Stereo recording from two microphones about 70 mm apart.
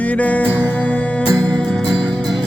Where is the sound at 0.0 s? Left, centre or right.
Left.